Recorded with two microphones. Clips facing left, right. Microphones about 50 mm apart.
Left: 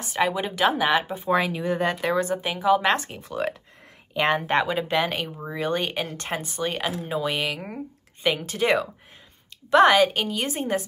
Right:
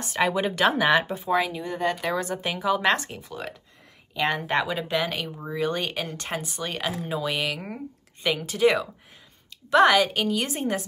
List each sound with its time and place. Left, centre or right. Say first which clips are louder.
0.0 s speech: even; centre